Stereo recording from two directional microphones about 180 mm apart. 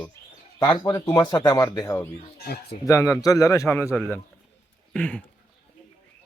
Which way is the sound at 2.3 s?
60° left (ahead or behind).